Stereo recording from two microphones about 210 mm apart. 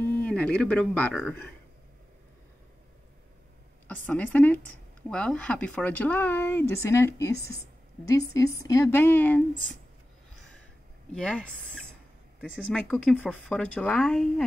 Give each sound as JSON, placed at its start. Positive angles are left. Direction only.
{"t": 0.1, "sound": "speech", "side_deg": 5}
{"t": 3.8, "sound": "speech", "side_deg": 5}
{"t": 11.1, "sound": "speech", "side_deg": 5}